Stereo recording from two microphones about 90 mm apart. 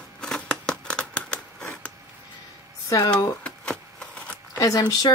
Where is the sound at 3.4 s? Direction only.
10° left (ahead or behind).